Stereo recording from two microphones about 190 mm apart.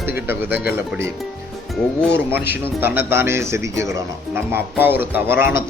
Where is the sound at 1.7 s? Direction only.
5° left (ahead or behind).